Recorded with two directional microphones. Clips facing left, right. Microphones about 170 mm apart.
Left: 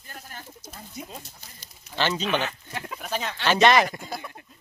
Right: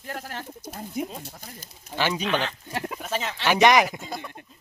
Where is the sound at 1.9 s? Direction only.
10° right (ahead or behind).